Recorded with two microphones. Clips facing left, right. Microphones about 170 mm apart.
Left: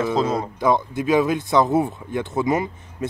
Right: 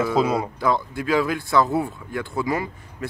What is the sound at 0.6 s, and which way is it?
Speech, 20° left (ahead or behind).